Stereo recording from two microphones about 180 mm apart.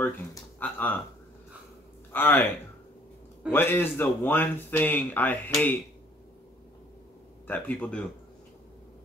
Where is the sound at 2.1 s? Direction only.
10° left (ahead or behind).